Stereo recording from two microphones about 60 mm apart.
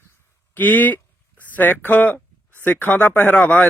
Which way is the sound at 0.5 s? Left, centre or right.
Left.